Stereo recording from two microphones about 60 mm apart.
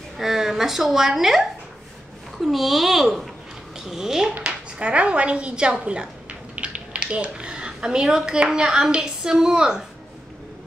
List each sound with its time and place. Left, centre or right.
0.2 s a woman's voice: centre